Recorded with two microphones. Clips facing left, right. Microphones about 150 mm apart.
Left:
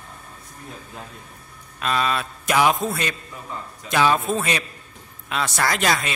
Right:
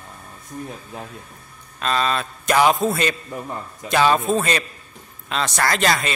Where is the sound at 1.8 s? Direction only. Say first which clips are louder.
Right 1 dB; 5° left (ahead or behind).